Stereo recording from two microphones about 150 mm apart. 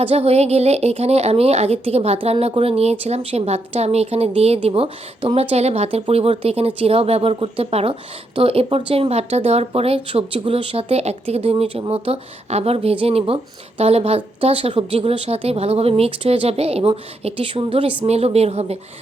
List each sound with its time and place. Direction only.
0.0 s a woman's voice: 40° right (ahead or behind)